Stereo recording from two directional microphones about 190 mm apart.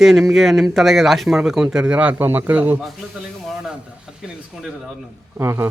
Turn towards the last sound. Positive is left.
turn(degrees=-15)  # may be behind; listen again after turning